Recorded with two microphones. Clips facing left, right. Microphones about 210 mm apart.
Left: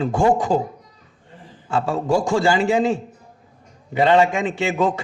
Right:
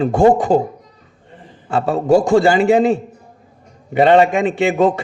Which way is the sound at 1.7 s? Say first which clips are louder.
Right 6 dB; 60° right (ahead or behind).